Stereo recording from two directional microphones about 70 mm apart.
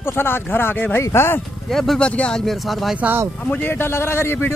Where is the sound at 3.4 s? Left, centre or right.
Left.